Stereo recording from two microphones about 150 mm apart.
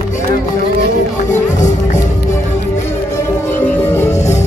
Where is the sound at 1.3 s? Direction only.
55° left (ahead or behind).